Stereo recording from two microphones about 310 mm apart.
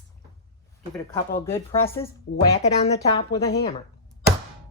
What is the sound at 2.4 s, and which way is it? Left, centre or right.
Speech, left.